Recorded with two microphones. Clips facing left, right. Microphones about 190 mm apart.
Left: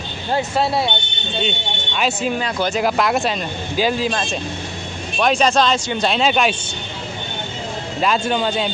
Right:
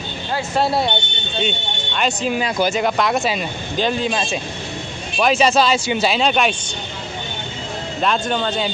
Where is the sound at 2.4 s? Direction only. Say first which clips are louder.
Right 2 dB; 10° right (ahead or behind).